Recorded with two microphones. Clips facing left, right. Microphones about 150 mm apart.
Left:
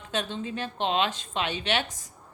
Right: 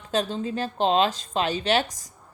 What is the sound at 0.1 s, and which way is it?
Speech, 35° right (ahead or behind).